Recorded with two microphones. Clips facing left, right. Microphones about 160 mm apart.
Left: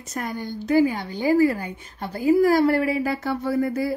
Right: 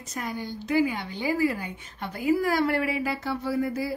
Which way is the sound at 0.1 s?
50° left (ahead or behind).